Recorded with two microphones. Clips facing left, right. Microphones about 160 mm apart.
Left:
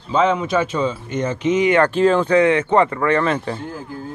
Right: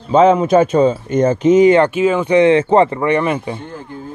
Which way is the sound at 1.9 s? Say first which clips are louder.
Even; 5° right (ahead or behind).